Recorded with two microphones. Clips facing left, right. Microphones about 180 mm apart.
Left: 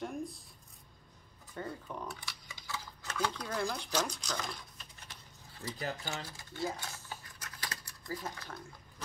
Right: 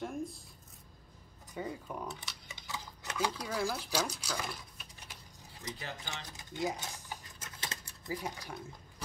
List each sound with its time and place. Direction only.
0.0 s speech: centre (ahead or behind)
1.5 s speech: 10° right (ahead or behind)
2.0 s a sound: 20° right (ahead or behind)
3.3 s speech: 5° right (ahead or behind)
5.8 s speech: 40° left (ahead or behind)
6.3 s a sound: 15° right (ahead or behind)